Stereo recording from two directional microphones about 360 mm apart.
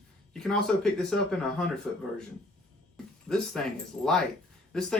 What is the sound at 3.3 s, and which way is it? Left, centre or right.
Speech, centre.